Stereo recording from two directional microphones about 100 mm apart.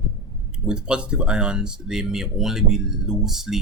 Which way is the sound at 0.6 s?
10° right (ahead or behind).